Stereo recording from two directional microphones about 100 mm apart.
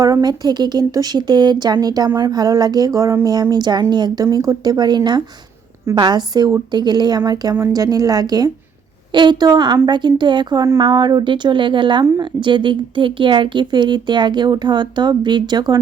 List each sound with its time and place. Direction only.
0.0 s a woman's voice: 40° right (ahead or behind)